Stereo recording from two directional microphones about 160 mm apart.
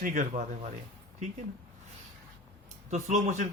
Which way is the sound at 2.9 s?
45° right (ahead or behind).